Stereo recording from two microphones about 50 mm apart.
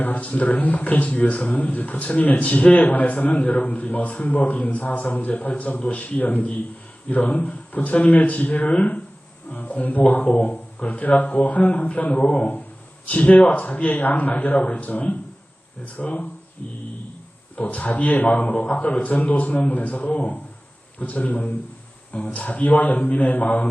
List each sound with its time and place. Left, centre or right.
0.0 s a man's voice: left
17.6 s a man's voice: left